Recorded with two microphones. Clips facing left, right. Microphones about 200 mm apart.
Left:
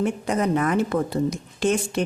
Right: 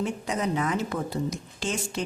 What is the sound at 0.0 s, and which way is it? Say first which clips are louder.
Speech: left 5 dB; 55° left (ahead or behind).